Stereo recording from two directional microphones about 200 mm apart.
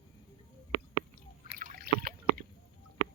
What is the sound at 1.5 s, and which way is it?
Rowboat, 45° right (ahead or behind).